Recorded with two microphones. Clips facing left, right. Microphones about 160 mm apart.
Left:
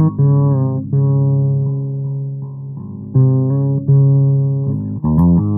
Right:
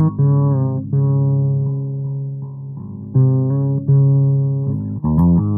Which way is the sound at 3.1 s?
35° left (ahead or behind).